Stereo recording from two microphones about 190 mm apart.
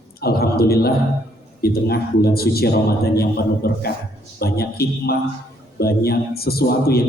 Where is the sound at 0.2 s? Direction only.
55° left (ahead or behind).